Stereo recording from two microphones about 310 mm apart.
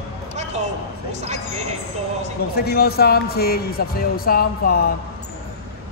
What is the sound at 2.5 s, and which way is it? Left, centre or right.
Speech, left.